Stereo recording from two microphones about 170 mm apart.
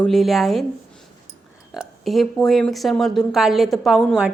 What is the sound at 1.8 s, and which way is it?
Speech, centre (ahead or behind).